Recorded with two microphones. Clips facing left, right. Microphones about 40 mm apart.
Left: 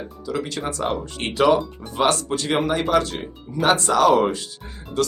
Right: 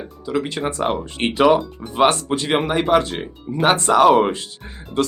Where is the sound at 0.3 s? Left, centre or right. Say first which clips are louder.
Right 4 dB; right.